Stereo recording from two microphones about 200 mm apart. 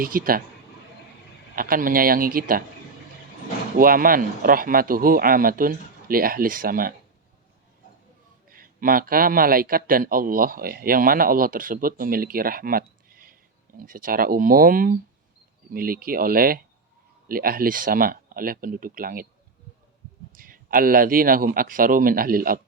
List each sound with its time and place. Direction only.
0.0 s a man's voice: 45° right (ahead or behind)
1.5 s a man's voice: 45° right (ahead or behind)
3.8 s a man's voice: 45° right (ahead or behind)
8.4 s a man's voice: 45° right (ahead or behind)
20.3 s a man's voice: 45° right (ahead or behind)